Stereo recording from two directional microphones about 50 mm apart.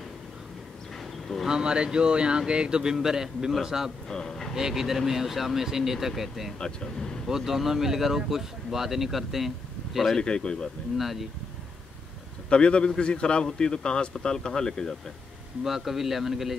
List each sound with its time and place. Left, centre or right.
1.5 s speech: centre
4.1 s a sound: centre
4.6 s speech: centre
6.6 s a man's voice: centre
7.2 s speech: centre
10.1 s a man's voice: centre
11.0 s speech: centre
12.4 s a man's voice: left
15.6 s speech: centre